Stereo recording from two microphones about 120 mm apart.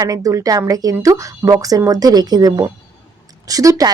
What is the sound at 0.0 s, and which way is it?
Speech, 30° right (ahead or behind).